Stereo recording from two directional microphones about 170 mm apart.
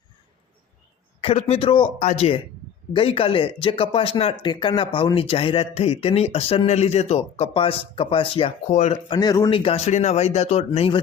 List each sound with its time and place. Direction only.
1.2 s speech: 35° left (ahead or behind)
9.0 s speech: 25° left (ahead or behind)
9.6 s speech: 40° left (ahead or behind)